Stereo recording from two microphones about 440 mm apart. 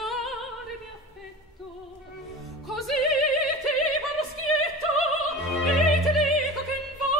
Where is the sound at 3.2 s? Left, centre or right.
Left.